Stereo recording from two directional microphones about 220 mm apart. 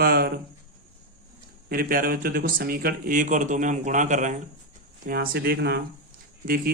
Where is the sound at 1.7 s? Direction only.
40° right (ahead or behind).